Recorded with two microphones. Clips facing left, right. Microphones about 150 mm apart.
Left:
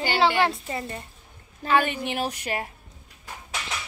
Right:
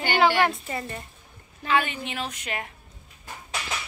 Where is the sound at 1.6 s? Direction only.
35° left (ahead or behind).